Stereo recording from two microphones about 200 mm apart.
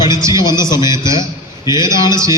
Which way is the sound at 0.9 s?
15° right (ahead or behind).